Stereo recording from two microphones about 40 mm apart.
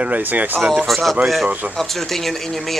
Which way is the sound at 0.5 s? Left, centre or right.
Centre.